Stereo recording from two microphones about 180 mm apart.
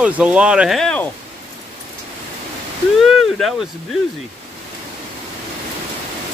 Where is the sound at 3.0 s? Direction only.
Centre (ahead or behind).